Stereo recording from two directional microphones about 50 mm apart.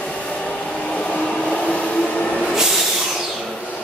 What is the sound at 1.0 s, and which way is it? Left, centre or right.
Train, left.